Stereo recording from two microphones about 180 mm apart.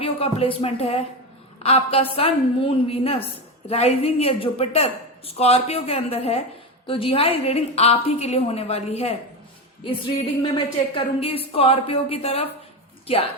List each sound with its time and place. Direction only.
0.0 s a woman's voice: 30° left (ahead or behind)